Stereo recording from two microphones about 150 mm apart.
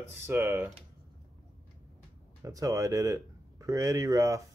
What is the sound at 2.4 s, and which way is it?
Speech, 25° right (ahead or behind).